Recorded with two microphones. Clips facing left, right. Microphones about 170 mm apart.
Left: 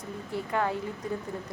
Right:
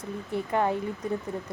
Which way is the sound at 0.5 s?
25° right (ahead or behind).